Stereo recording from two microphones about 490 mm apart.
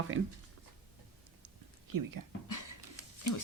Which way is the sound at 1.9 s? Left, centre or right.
Right.